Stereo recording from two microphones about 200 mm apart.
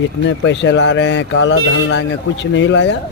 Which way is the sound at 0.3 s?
65° left (ahead or behind).